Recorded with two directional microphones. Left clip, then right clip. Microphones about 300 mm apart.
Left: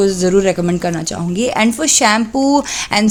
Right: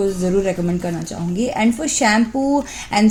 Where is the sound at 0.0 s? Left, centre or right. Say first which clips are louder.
Left 6 dB; left.